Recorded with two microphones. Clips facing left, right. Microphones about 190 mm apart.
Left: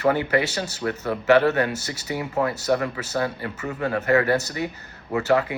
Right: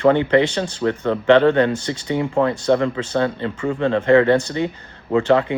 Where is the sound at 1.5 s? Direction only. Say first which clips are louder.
Right 6 dB; 25° right (ahead or behind).